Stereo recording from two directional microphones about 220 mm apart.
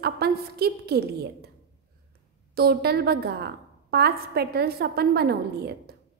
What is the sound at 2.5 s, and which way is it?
A woman's voice, 45° right (ahead or behind).